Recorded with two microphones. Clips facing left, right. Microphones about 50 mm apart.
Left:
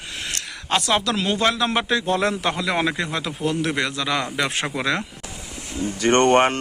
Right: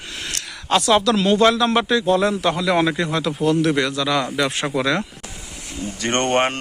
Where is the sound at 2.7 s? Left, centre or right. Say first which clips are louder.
Right 4 dB; centre; by 4.6 s left.